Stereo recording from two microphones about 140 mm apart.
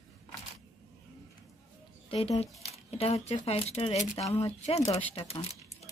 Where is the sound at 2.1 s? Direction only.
45° left (ahead or behind).